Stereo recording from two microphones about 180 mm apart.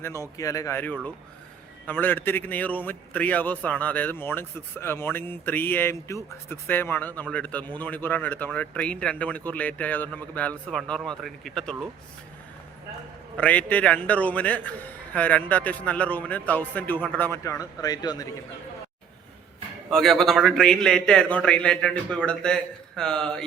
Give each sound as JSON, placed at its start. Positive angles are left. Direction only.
{"t": 0.0, "sound": "a man's voice", "side_deg": 15}
{"t": 13.3, "sound": "a man's voice", "side_deg": 10}
{"t": 19.9, "sound": "a man's voice", "side_deg": 0}